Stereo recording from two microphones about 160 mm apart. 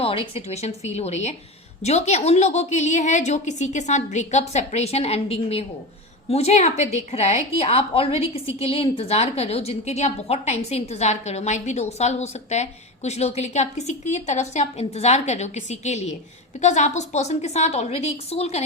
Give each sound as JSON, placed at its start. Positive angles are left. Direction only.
{"t": 0.0, "sound": "a woman's voice", "side_deg": 35}